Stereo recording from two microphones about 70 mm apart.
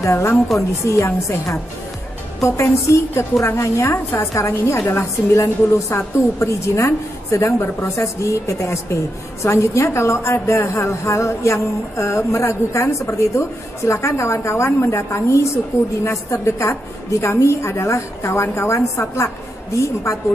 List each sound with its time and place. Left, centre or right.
0.0 s a woman's voice: left